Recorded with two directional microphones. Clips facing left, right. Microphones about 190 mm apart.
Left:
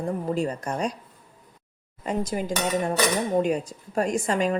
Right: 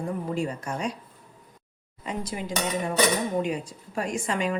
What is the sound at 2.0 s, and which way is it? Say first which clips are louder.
A woman's voice: left 5 dB; 45° left (ahead or behind).